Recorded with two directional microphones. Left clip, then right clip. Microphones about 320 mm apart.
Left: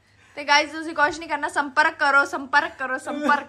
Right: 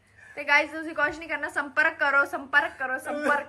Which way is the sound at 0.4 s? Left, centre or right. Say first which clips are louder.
Left 3 dB; centre.